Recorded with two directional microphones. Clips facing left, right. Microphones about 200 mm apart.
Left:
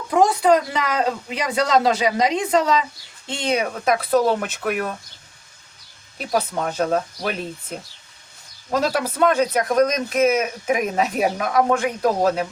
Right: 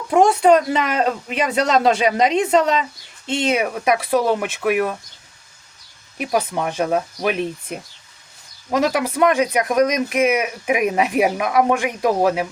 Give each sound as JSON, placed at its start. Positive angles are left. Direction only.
{"t": 0.2, "sound": "speech", "side_deg": -25}
{"t": 6.1, "sound": "speech", "side_deg": -10}